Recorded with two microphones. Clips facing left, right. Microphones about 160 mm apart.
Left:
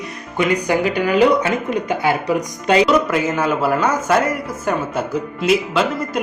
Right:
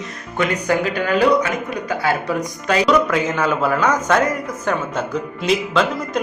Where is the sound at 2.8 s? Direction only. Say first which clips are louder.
Even; 5° left (ahead or behind).